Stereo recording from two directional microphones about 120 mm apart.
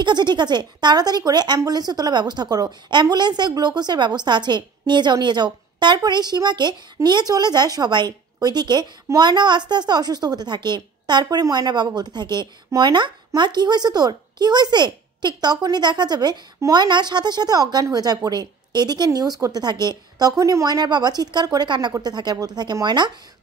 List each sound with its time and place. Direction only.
0.0 s a woman's voice: 40° right (ahead or behind)